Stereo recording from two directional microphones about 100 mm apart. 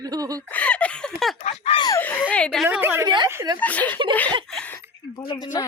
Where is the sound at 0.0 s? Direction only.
40° right (ahead or behind).